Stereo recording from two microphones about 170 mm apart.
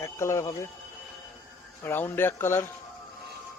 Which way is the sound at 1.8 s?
15° left (ahead or behind).